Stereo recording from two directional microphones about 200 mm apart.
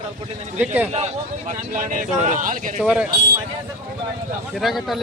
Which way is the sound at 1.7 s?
40° right (ahead or behind).